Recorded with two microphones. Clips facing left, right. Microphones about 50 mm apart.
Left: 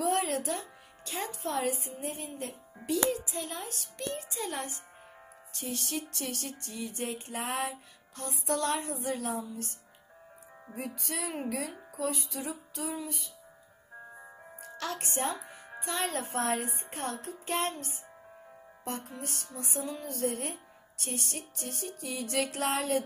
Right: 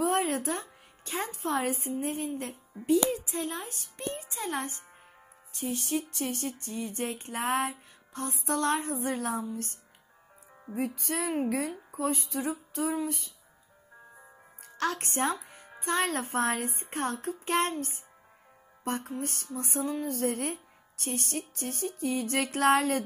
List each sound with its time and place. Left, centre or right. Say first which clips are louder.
0.0 s music: right 2 dB; right
4.0 s speech: even; right
4.3 s music: right 2 dB; right
5.5 s speech: right 5 dB; right
6.7 s music: right 1 dB; right
14.8 s music: right 4 dB; right